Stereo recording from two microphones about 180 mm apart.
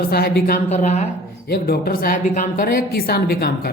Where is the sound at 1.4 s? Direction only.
60° left (ahead or behind).